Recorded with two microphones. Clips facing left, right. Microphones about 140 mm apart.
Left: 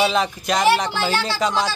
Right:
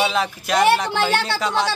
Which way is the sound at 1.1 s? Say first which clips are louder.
Right 2 dB; 55° right (ahead or behind).